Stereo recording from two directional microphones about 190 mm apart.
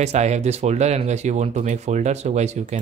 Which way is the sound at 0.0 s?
35° right (ahead or behind).